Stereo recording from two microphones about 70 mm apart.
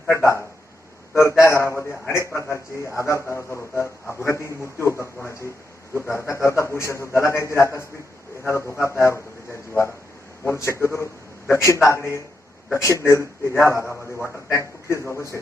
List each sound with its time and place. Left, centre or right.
0.1 s a man's voice: left
14.8 s speech: left